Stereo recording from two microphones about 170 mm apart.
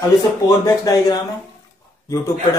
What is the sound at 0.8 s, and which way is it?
Speech, 20° left (ahead or behind).